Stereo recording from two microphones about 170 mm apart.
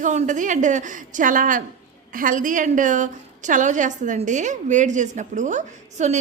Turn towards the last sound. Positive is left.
turn(degrees=-45)  # may be behind; listen again after turning